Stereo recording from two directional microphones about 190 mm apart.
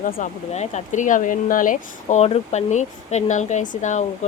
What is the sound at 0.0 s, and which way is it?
Speech, 40° left (ahead or behind).